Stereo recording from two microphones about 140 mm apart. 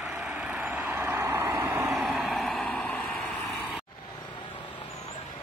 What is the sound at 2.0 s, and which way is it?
Vehicle, centre (ahead or behind).